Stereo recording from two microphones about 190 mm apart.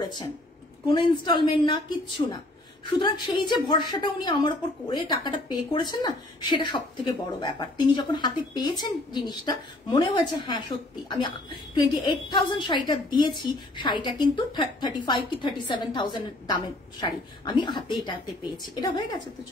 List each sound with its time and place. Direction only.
0.0 s a woman's voice: 20° left (ahead or behind)